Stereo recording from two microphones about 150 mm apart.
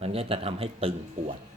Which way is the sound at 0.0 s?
40° right (ahead or behind).